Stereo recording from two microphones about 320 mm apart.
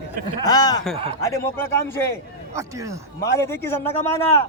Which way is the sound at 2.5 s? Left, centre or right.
Centre.